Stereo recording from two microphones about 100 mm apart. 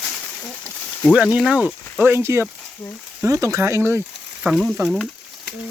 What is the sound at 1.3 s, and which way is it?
Speech, 10° right (ahead or behind).